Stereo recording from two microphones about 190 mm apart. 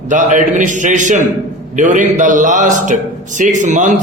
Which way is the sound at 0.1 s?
40° right (ahead or behind).